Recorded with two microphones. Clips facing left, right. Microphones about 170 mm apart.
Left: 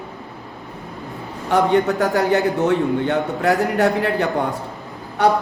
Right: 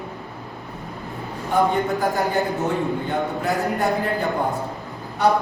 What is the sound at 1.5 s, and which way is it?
A man's voice, 75° left (ahead or behind).